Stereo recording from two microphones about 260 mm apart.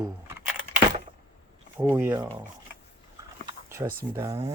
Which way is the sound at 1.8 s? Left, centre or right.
Centre.